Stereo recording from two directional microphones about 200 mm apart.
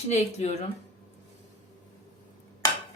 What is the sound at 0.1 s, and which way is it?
Speech, 35° left (ahead or behind).